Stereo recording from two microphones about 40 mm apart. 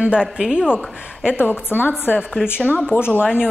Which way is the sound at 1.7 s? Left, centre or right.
Left.